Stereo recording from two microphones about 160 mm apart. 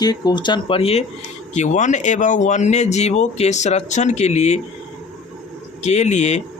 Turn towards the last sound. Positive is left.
turn(degrees=45)  # may be behind; listen again after turning